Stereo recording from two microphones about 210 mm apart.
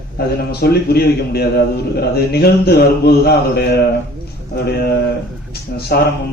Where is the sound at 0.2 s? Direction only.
50° left (ahead or behind).